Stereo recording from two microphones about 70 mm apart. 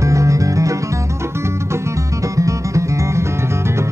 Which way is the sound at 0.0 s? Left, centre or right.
Right.